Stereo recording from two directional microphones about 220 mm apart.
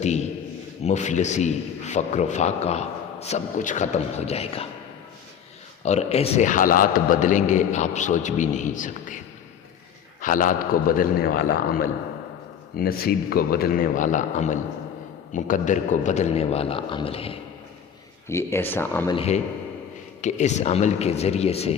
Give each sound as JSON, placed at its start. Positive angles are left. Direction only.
{"t": 0.0, "sound": "a sound", "side_deg": 30}
{"t": 0.9, "sound": "a man's voice", "side_deg": 35}
{"t": 5.8, "sound": "a man's voice", "side_deg": 30}
{"t": 10.2, "sound": "a man's voice", "side_deg": 35}
{"t": 18.3, "sound": "speech", "side_deg": 10}
{"t": 19.1, "sound": "a man's voice", "side_deg": 25}